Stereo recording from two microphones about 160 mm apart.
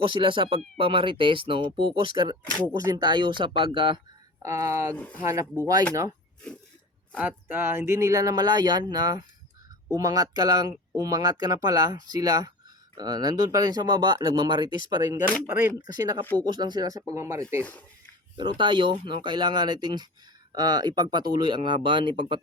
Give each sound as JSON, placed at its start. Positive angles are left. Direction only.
{"t": 0.1, "sound": "speech", "side_deg": -30}
{"t": 4.4, "sound": "speech", "side_deg": -15}
{"t": 4.9, "sound": "speech", "side_deg": 10}
{"t": 5.2, "sound": "speech", "side_deg": -20}
{"t": 7.2, "sound": "speech", "side_deg": -10}
{"t": 17.6, "sound": "speech", "side_deg": 10}
{"t": 18.3, "sound": "speech", "side_deg": -30}